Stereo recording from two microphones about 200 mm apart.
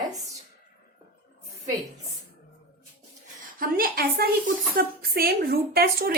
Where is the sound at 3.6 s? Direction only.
50° right (ahead or behind).